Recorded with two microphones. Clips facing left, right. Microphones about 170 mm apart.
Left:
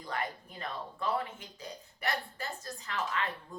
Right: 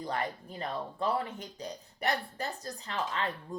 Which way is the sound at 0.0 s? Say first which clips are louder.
Right 3 dB; 35° right (ahead or behind).